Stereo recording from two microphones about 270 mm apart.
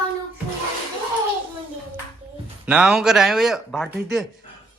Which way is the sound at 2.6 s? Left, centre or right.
Centre.